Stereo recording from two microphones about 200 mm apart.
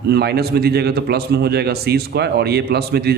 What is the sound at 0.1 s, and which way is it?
A man's voice, 55° right (ahead or behind).